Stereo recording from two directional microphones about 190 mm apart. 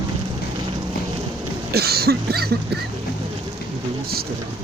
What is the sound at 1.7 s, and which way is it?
Cough, 55° right (ahead or behind).